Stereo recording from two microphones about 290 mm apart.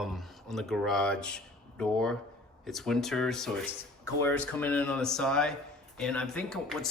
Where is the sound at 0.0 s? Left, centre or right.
Centre.